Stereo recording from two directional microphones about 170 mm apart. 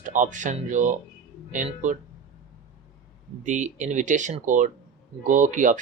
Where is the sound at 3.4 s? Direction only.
45° right (ahead or behind).